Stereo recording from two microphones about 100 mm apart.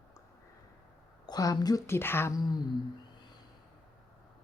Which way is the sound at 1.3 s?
40° left (ahead or behind).